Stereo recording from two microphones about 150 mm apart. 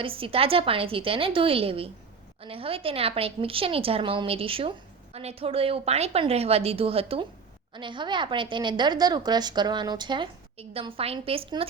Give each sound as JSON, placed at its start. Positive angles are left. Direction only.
{"t": 0.0, "sound": "a woman's voice", "side_deg": -35}